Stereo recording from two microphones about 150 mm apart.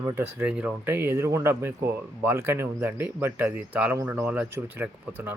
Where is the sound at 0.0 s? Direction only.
15° right (ahead or behind).